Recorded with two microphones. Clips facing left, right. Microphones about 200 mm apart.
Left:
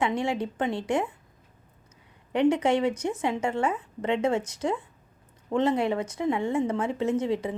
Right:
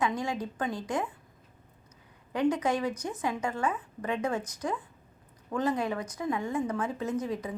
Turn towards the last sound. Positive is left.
turn(degrees=25)  # may be behind; listen again after turning